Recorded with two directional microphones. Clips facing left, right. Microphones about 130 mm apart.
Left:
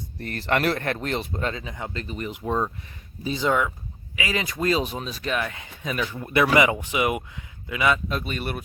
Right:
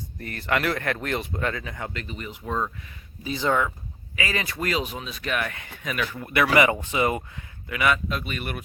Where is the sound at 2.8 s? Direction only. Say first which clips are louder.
Left 4 dB; 35° left (ahead or behind).